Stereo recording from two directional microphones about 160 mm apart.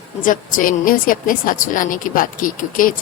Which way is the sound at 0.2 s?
55° left (ahead or behind).